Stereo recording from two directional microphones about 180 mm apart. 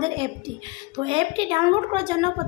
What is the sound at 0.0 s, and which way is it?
A woman's voice, 30° right (ahead or behind).